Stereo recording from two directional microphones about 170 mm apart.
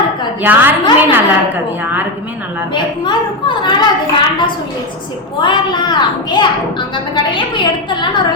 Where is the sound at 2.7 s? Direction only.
25° left (ahead or behind).